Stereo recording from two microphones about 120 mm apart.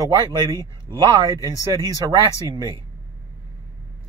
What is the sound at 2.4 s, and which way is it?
Speech, 30° right (ahead or behind).